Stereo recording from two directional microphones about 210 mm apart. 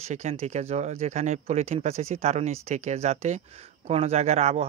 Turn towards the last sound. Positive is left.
turn(degrees=-30)  # may be behind; listen again after turning